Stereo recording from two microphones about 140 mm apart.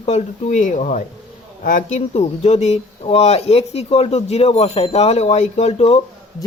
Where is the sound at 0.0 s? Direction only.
50° left (ahead or behind); by 2.0 s 70° left (ahead or behind).